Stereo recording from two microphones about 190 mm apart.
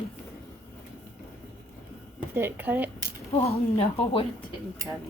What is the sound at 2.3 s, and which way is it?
Speech, 10° right (ahead or behind).